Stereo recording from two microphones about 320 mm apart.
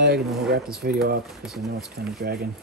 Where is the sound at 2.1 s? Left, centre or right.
Right.